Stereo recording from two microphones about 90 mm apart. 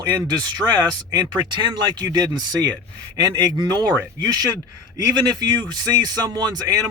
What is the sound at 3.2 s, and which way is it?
A man's voice, 55° right (ahead or behind).